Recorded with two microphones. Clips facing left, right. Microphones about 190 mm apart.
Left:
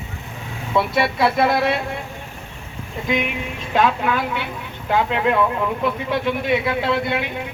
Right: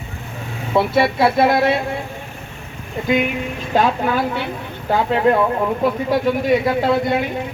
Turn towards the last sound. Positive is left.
turn(degrees=-40)  # may be behind; listen again after turning